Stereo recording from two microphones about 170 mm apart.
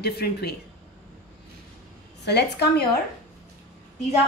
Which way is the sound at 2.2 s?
80° left.